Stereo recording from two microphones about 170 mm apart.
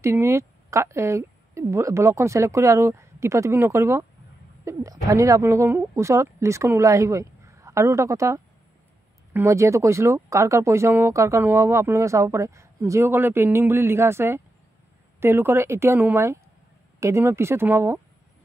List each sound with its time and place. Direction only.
0.0 s a woman's voice: 15° right (ahead or behind)